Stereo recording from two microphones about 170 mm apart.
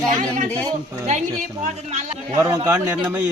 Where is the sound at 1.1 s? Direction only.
45° right (ahead or behind).